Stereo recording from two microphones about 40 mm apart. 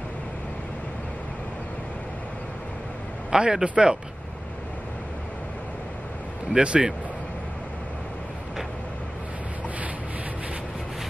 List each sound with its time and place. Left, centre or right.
3.3 s a man's voice: centre
6.6 s speech: right